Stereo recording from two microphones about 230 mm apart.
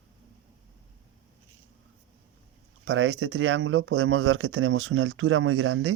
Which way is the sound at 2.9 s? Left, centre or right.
Right.